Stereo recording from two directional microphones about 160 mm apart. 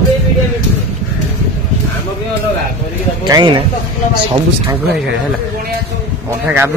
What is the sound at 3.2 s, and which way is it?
Speech, 25° right (ahead or behind).